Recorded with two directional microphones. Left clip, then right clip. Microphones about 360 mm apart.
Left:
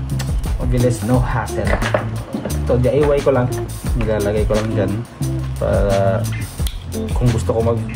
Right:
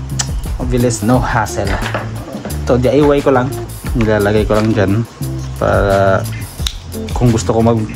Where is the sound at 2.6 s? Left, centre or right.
Right.